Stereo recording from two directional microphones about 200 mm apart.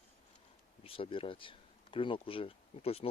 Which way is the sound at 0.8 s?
25° left (ahead or behind).